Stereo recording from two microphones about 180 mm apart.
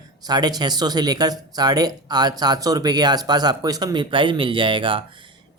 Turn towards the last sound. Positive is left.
turn(degrees=-30)  # may be behind; listen again after turning